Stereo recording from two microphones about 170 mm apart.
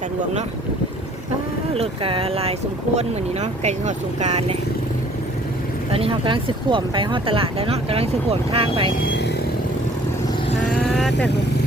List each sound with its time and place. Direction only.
1.7 s speech: 35° right (ahead or behind)
5.9 s speech: 30° right (ahead or behind)
9.0 s vehicle: 80° left
10.7 s vehicle: centre (ahead or behind)